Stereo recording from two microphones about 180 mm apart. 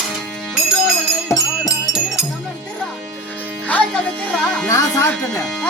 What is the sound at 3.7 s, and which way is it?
Music, 5° left (ahead or behind).